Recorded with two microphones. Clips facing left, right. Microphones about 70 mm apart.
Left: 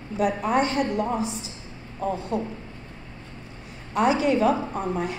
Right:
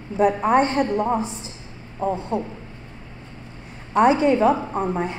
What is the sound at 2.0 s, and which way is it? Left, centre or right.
Speech, right.